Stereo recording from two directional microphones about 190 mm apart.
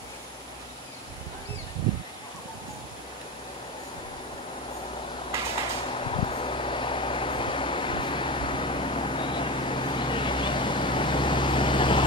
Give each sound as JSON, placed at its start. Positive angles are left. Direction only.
{"t": 5.9, "sound": "vehicle", "side_deg": 30}